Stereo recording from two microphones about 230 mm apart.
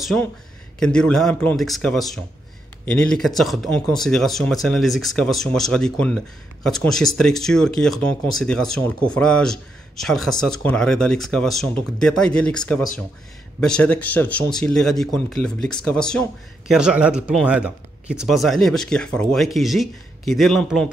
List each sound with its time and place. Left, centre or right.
0.0 s speech: centre